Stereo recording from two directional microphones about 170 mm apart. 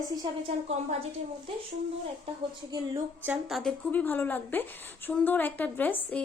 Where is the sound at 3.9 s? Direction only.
10° left (ahead or behind).